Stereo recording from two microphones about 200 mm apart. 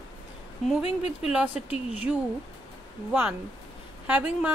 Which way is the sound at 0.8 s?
30° left (ahead or behind).